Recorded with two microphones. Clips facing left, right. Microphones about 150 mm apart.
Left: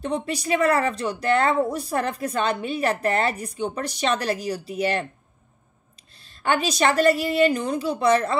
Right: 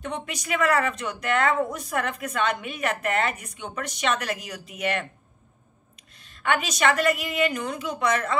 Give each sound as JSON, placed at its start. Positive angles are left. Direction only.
{"t": 0.0, "sound": "speech", "side_deg": 35}
{"t": 6.1, "sound": "speech", "side_deg": 30}